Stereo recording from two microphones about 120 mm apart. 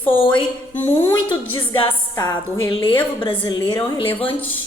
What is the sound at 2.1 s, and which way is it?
A woman's voice, 35° left (ahead or behind).